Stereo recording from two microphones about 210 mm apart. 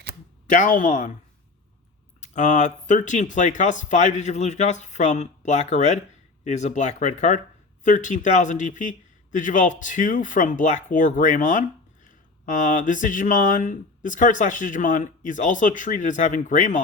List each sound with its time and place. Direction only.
0.5 s speech: 40° left (ahead or behind)
2.2 s speech: 35° left (ahead or behind)